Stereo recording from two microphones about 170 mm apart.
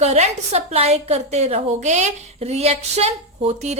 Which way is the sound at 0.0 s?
40° right (ahead or behind).